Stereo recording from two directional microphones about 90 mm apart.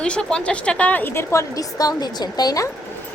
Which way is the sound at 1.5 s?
40° left (ahead or behind).